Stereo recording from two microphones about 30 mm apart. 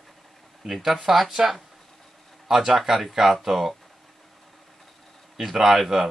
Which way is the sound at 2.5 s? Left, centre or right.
Centre.